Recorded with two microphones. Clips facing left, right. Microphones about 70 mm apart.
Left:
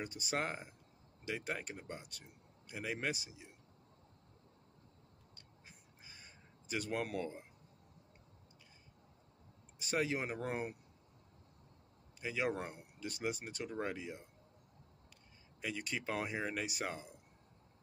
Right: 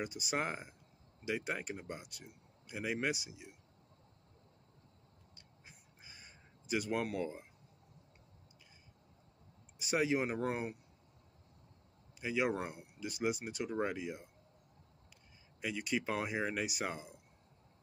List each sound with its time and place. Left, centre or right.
0.0 s speech: centre
5.3 s a sound: centre
9.8 s speech: centre
12.2 s speech: centre
15.6 s speech: centre